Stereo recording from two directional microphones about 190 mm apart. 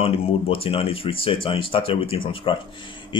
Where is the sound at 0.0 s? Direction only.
30° left (ahead or behind).